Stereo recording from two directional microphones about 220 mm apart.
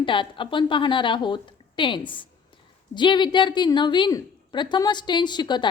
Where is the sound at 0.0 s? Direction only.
20° left (ahead or behind).